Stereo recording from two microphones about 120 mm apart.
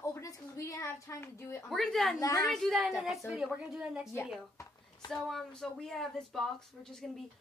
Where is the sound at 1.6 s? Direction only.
5° left (ahead or behind).